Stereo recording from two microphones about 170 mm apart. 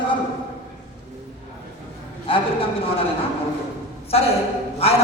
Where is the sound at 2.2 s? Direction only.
30° left (ahead or behind).